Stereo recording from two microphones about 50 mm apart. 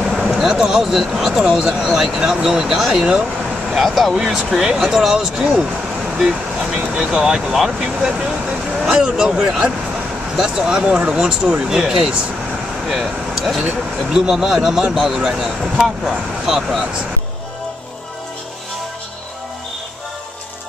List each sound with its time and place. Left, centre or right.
0.3 s speech: centre
2.9 s speech: centre
3.7 s speech: centre
6.1 s vehicle: centre
7.0 s speech: centre
12.8 s speech: centre